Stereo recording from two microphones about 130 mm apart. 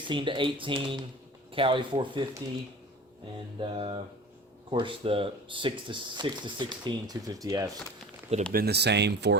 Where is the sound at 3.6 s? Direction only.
45° right (ahead or behind); by 7.7 s 25° right (ahead or behind).